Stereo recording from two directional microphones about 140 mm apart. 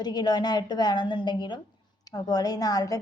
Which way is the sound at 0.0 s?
30° left (ahead or behind).